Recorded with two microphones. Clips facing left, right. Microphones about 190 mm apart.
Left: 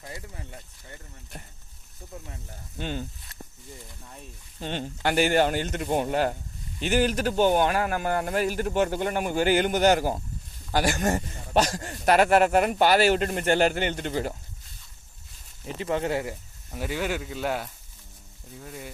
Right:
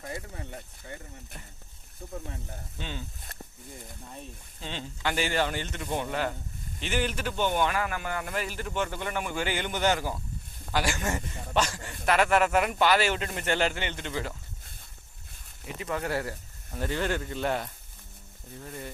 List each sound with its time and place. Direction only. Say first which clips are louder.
2.7 s a man's voice: left 7 dB; 45° left (ahead or behind)
4.6 s a man's voice: left 5 dB; 55° left (ahead or behind)
15.6 s speech: left 5 dB; 30° left (ahead or behind); by 18.9 s 5° left (ahead or behind)